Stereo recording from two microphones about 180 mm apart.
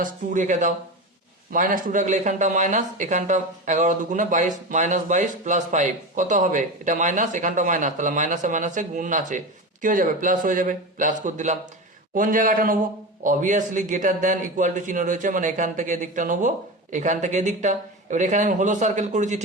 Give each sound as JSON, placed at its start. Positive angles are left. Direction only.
{"t": 0.0, "sound": "speech", "side_deg": -45}